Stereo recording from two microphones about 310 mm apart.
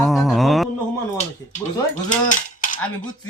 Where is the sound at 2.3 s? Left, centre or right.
Left.